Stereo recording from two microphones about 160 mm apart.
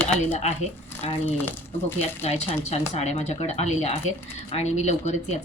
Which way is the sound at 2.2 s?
40° left (ahead or behind).